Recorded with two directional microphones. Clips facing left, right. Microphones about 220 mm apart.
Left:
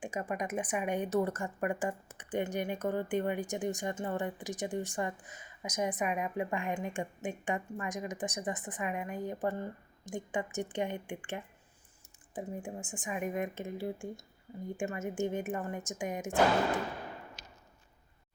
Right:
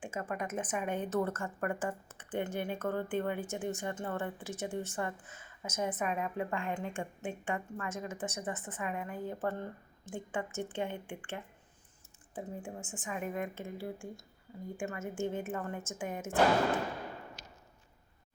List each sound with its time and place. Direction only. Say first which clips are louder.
0.0 s a woman's voice: left 2 dB; 15° left (ahead or behind)